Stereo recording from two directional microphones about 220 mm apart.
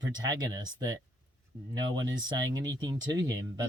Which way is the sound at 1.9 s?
20° right (ahead or behind).